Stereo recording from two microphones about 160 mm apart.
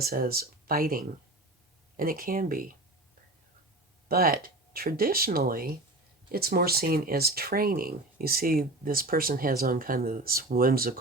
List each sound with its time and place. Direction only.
0.0 s speech: 70° right (ahead or behind)
4.1 s speech: 65° right (ahead or behind)